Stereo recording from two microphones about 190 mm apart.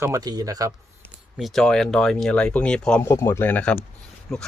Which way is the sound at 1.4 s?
Centre (ahead or behind).